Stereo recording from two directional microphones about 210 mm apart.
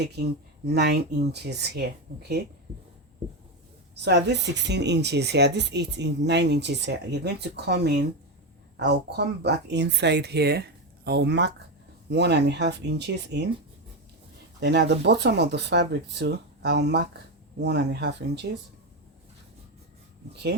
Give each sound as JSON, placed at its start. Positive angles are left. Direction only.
{"t": 0.0, "sound": "speech", "side_deg": -50}
{"t": 2.1, "sound": "speech", "side_deg": -40}
{"t": 4.0, "sound": "speech", "side_deg": -55}
{"t": 14.6, "sound": "speech", "side_deg": -55}
{"t": 20.3, "sound": "speech", "side_deg": -55}